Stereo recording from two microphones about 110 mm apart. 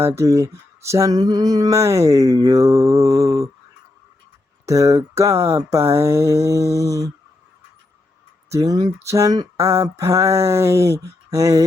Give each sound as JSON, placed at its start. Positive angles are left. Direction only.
{"t": 0.0, "sound": "speech", "side_deg": -25}
{"t": 4.6, "sound": "speech", "side_deg": -30}
{"t": 8.4, "sound": "speech", "side_deg": -30}